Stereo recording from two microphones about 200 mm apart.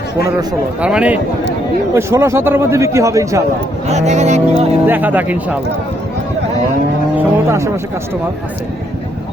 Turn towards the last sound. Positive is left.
turn(degrees=-15)  # may be behind; listen again after turning